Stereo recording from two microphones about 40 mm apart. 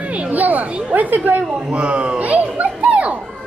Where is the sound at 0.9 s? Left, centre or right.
Right.